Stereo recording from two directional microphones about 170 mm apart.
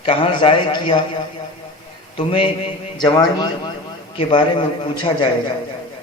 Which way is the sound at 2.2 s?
30° left (ahead or behind).